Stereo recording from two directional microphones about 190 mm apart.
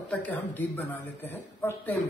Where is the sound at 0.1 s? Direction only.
10° left (ahead or behind).